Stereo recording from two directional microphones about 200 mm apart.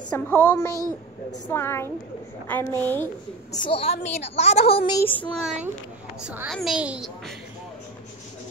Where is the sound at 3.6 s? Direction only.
30° left (ahead or behind).